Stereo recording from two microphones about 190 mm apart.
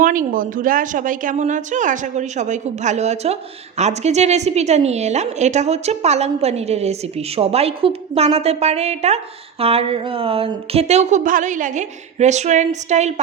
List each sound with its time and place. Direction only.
0.0 s a woman's voice: 45° right (ahead or behind)